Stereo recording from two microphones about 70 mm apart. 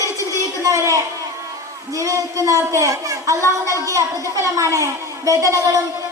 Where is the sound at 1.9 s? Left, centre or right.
Right.